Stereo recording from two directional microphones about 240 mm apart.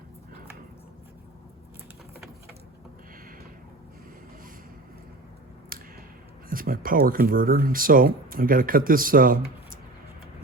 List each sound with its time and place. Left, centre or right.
6.5 s speech: right